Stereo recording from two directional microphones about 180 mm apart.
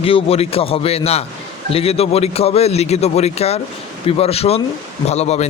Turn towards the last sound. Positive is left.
turn(degrees=35)  # may be behind; listen again after turning